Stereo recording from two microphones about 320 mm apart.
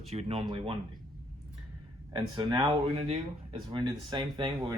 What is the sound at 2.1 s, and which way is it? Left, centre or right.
Speech, centre.